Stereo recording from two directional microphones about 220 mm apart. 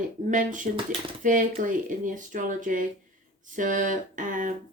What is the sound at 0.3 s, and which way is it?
Speech, 35° right (ahead or behind).